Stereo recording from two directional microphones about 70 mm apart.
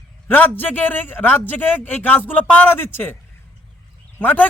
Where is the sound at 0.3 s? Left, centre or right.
Left.